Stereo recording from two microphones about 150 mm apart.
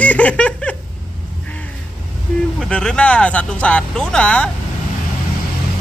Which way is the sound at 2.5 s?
5° left (ahead or behind).